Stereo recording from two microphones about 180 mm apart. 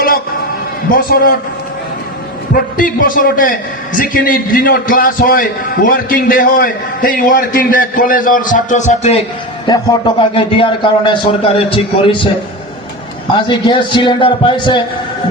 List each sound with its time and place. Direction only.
1.1 s a man's voice: 50° left (ahead or behind)
2.7 s a man's voice: 50° left (ahead or behind)
9.6 s a man's voice: 25° left (ahead or behind)
13.5 s a man's voice: 25° left (ahead or behind)